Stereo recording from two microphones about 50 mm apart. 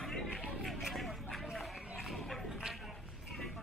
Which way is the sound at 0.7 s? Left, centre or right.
Centre.